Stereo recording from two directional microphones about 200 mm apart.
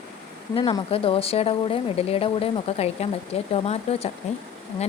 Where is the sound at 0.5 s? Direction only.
25° left (ahead or behind).